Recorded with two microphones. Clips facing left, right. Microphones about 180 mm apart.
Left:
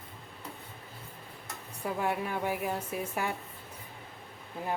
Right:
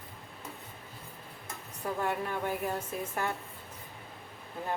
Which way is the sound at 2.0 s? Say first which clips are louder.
Left 1 dB; 10° left (ahead or behind).